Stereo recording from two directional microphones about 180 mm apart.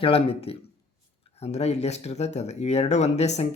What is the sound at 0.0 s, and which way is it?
Speech, 30° left (ahead or behind).